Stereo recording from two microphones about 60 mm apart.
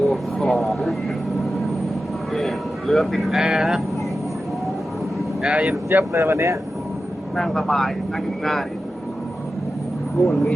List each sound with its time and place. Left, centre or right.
0.0 s vehicle: centre
2.3 s speech: centre
5.4 s speech: centre
5.9 s speech: right
6.2 s speech: right
7.3 s speech: centre
10.2 s speech: centre